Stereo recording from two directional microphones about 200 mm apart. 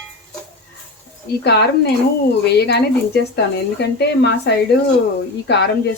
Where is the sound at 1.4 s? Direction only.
55° left (ahead or behind).